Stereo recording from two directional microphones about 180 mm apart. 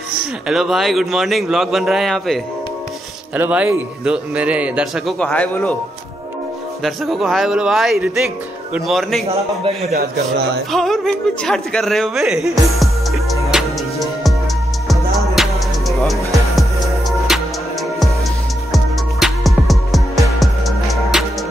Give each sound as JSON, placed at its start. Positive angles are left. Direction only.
{"t": 0.5, "sound": "a man's voice", "side_deg": 0}
{"t": 5.2, "sound": "a man's voice", "side_deg": 10}
{"t": 6.8, "sound": "a man's voice", "side_deg": 0}
{"t": 9.3, "sound": "a man's voice", "side_deg": -35}
{"t": 9.9, "sound": "a man's voice", "side_deg": -65}
{"t": 10.7, "sound": "a man's voice", "side_deg": 0}
{"t": 15.4, "sound": "music", "side_deg": 0}
{"t": 17.3, "sound": "music", "side_deg": 0}
{"t": 18.7, "sound": "music", "side_deg": 0}